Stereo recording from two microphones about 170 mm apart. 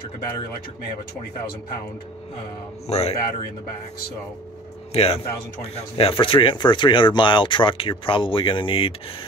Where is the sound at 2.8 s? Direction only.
40° left (ahead or behind).